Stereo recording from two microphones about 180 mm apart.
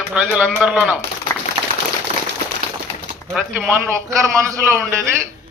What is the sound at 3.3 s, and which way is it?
Speech, centre (ahead or behind).